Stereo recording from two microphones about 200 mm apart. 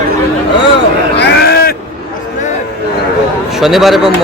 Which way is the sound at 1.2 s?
55° left (ahead or behind).